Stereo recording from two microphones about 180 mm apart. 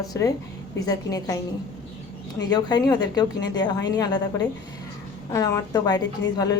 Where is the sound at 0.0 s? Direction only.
20° left (ahead or behind).